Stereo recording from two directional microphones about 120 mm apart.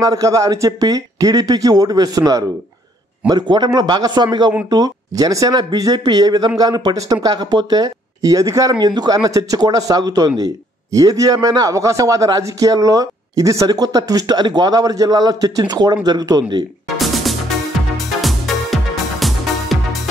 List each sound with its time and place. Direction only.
0.0 s speech: 30° right (ahead or behind)
16.9 s music: centre (ahead or behind)